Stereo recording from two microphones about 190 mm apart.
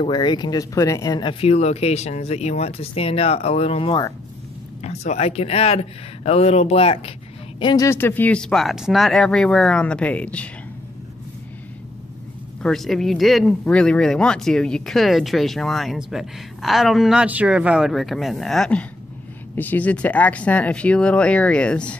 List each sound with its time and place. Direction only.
0.0 s speech: 25° left (ahead or behind); by 10.5 s 5° left (ahead or behind)
12.6 s speech: centre (ahead or behind)